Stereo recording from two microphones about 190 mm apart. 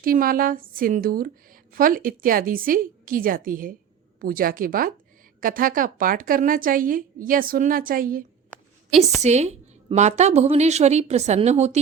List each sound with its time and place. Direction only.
0.0 s a woman's voice: 50° right (ahead or behind)
8.9 s a woman's voice: centre (ahead or behind)
9.2 s a woman's voice: 35° right (ahead or behind)